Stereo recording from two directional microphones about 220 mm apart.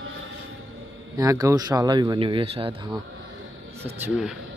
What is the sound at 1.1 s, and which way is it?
Speech, 15° right (ahead or behind).